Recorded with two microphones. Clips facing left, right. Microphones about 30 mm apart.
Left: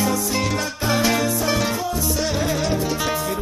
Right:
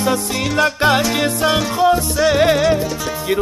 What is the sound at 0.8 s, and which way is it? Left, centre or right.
Music, right.